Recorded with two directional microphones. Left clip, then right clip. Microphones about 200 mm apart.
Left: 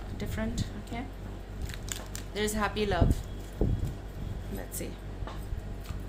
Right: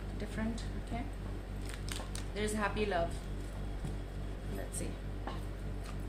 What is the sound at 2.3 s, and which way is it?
Speech, 45° left (ahead or behind).